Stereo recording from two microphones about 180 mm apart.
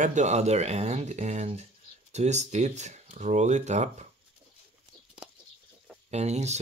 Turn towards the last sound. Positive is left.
turn(degrees=-40)  # may be behind; listen again after turning